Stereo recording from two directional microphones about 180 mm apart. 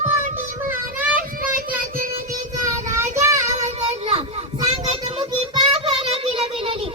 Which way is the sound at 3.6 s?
35° right (ahead or behind).